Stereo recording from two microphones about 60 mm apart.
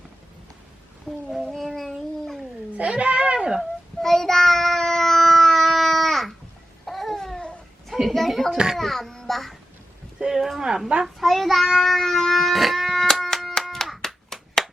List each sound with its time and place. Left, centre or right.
1.3 s cat: centre
2.7 s speech: right
3.6 s child singing: centre
6.8 s babbling: centre
7.9 s a woman's voice: centre
8.5 s speech: centre
8.8 s a child's voice: centre
10.2 s speech: centre
11.0 s child singing: centre
13.7 s hands: centre